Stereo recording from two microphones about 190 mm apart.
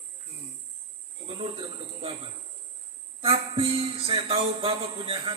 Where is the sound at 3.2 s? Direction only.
30° right (ahead or behind).